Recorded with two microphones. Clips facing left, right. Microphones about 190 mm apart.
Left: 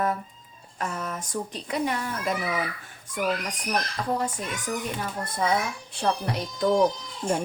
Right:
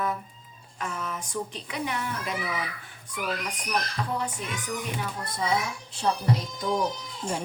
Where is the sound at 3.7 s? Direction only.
40° left (ahead or behind).